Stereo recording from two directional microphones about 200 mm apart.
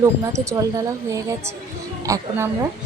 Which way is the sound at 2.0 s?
15° right (ahead or behind).